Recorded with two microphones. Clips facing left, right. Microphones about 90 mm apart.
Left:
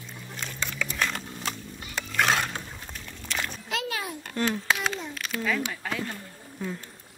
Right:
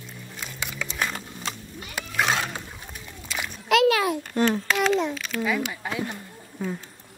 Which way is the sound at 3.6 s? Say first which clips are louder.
Right 17 dB; 80° right.